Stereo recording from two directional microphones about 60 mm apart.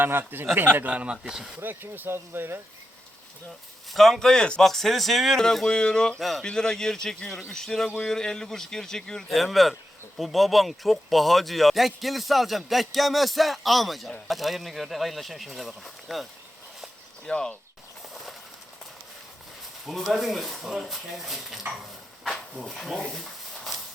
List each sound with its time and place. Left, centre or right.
0.0 s speech: right
0.9 s speech: centre
1.6 s speech: right
3.8 s a man's voice: centre
6.1 s speech: centre
6.4 s a man's voice: centre
17.2 s a man's voice: centre
19.9 s speech: centre
22.2 s a sound: centre